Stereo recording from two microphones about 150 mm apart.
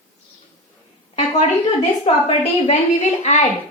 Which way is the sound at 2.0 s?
45° left (ahead or behind).